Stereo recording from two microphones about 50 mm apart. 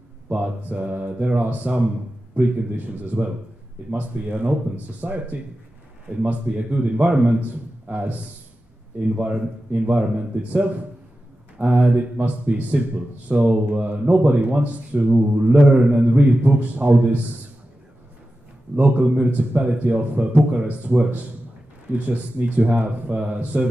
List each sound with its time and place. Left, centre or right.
0.3 s speech: right
7.3 s a man's voice: right
19.0 s speech: right